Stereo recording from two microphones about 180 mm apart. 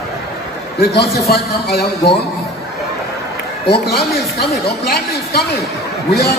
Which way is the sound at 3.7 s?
60° left (ahead or behind).